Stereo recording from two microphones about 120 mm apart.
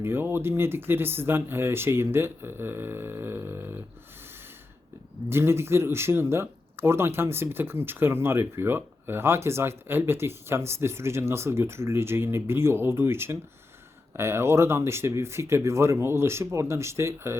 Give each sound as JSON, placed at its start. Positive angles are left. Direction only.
{"t": 0.0, "sound": "speech", "side_deg": -20}
{"t": 5.3, "sound": "speech", "side_deg": -20}